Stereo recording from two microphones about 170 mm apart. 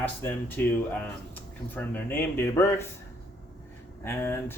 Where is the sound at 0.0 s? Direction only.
10° left (ahead or behind).